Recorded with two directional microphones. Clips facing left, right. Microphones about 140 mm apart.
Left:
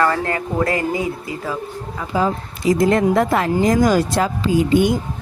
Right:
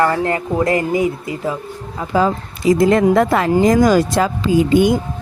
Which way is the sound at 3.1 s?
90° right.